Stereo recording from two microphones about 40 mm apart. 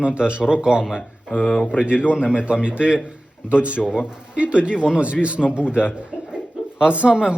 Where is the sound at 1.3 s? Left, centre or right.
Left.